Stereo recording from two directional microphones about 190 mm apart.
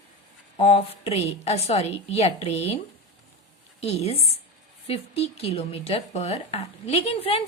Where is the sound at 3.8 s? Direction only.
35° left (ahead or behind).